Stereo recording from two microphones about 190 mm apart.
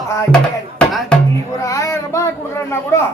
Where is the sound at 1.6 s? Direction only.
15° left (ahead or behind).